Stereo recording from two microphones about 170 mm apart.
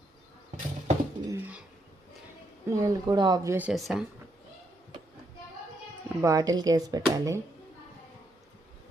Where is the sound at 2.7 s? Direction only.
20° right (ahead or behind).